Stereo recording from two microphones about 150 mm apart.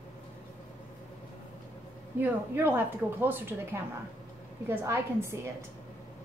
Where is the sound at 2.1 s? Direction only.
10° right (ahead or behind).